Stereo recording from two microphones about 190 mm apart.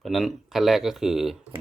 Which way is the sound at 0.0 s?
Centre (ahead or behind).